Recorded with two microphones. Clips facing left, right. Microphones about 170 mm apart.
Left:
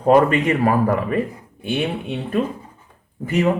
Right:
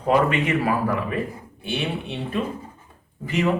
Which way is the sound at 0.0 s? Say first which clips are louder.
Left 5 dB; 45° left (ahead or behind).